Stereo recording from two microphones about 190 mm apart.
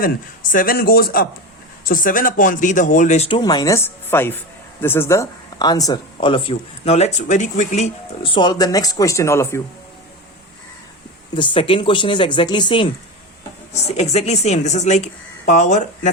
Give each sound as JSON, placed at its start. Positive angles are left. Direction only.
{"t": 0.5, "sound": "speech", "side_deg": 50}
{"t": 11.3, "sound": "speech", "side_deg": 25}